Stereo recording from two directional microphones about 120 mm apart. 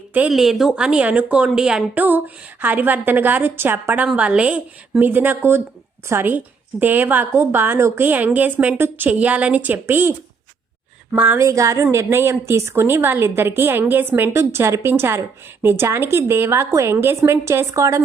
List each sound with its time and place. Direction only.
0.3 s a woman's voice: 5° right (ahead or behind)
11.4 s a woman's voice: 25° right (ahead or behind)